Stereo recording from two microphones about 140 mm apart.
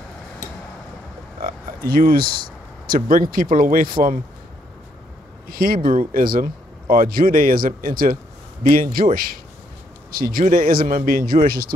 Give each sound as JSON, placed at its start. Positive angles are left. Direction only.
{"t": 1.4, "sound": "a sound", "side_deg": -90}
{"t": 2.9, "sound": "speech", "side_deg": -85}
{"t": 5.5, "sound": "speech", "side_deg": -90}